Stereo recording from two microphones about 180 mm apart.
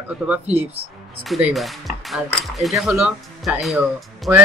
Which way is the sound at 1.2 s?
Centre (ahead or behind).